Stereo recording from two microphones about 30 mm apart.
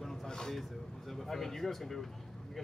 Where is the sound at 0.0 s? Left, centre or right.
Centre.